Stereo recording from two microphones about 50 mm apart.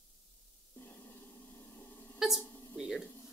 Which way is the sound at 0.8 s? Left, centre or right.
Left.